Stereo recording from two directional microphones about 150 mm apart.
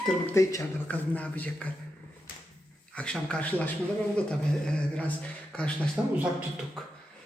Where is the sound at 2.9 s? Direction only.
5° left (ahead or behind).